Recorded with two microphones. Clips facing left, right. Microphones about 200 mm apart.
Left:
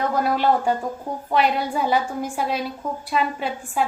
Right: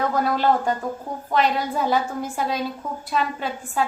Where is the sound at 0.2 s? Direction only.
5° left (ahead or behind).